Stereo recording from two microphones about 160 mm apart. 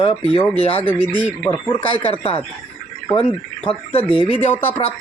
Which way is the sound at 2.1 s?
40° left (ahead or behind).